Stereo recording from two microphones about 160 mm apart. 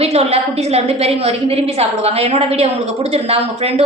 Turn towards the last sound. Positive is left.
turn(degrees=-40)  # may be behind; listen again after turning